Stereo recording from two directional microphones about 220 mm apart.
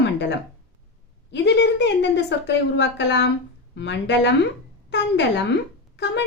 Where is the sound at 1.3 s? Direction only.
50° left (ahead or behind).